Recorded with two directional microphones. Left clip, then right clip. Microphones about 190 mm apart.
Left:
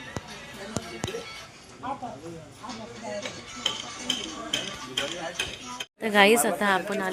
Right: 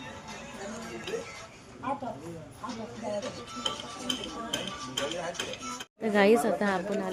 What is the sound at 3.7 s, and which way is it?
Speech, 40° left (ahead or behind).